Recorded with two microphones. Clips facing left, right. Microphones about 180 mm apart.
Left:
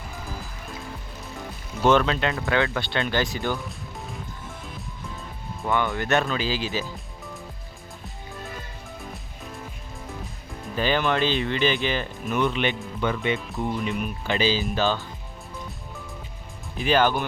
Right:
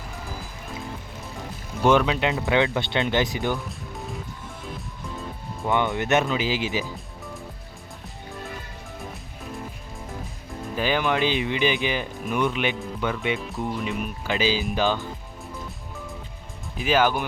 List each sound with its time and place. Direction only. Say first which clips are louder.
1.8 s speech: even; 10° right (ahead or behind)
3.7 s music: right 2 dB; centre (ahead or behind)
5.6 s speech: right 1 dB; 20° right (ahead or behind)
10.8 s speech: even; 10° right (ahead or behind)
16.7 s speech: even; 5° right (ahead or behind)